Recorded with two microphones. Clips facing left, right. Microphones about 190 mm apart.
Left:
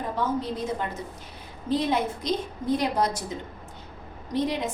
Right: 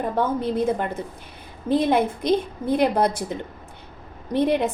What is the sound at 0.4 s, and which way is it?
A woman's voice, 55° right (ahead or behind).